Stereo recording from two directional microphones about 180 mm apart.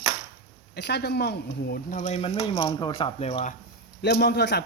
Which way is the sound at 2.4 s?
20° left (ahead or behind).